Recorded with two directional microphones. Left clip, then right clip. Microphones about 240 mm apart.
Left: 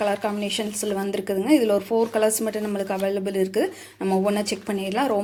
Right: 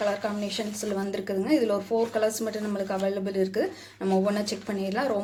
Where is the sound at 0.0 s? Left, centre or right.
Left.